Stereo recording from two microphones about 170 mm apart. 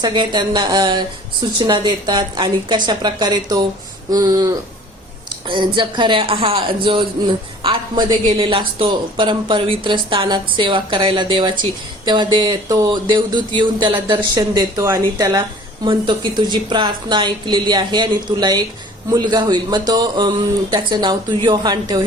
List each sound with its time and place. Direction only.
0.0 s speech: 25° right (ahead or behind)